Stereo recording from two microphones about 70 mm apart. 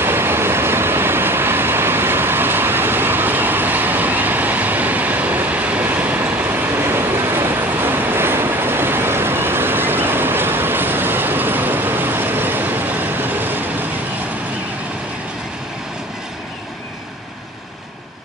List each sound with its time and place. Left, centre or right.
0.0 s vehicle: right